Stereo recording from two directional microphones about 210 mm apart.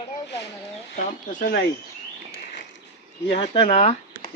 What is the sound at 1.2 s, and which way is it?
Speech, 45° left (ahead or behind).